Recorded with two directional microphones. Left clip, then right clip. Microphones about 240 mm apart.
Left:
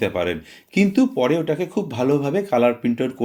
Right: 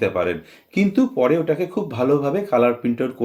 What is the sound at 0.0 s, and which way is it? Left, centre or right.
Speech, left.